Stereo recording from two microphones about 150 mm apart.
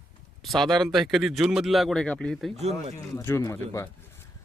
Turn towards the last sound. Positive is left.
turn(degrees=20)  # may be behind; listen again after turning